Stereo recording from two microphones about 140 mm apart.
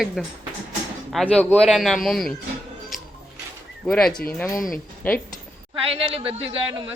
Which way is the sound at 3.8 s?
5° left (ahead or behind).